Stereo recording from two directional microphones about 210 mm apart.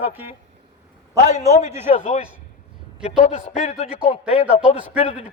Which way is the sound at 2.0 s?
25° left (ahead or behind).